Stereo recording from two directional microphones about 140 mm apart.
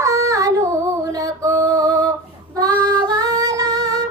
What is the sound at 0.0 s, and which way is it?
Female singing, 20° right (ahead or behind).